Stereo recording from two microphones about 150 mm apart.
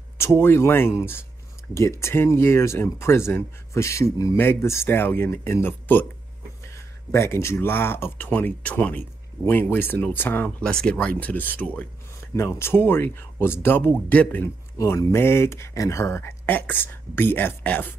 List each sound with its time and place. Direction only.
0.2 s speech: 15° left (ahead or behind)
14.8 s speech: 20° left (ahead or behind)